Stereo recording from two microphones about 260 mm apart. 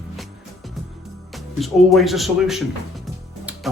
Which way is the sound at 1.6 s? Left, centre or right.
Centre.